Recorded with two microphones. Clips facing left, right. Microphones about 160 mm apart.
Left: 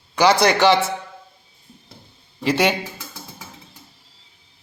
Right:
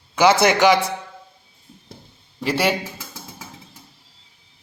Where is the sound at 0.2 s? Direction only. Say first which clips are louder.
Even; 20° right (ahead or behind).